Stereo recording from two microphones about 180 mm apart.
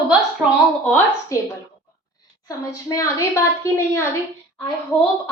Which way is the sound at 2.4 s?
20° left (ahead or behind).